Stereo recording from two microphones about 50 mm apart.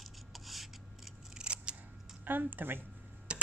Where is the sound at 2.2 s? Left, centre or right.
Right.